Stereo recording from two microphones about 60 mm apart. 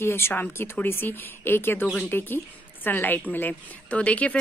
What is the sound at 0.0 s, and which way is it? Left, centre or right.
A woman's voice, left.